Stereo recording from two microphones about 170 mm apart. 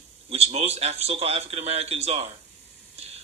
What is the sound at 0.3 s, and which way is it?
A man's voice, 40° right (ahead or behind).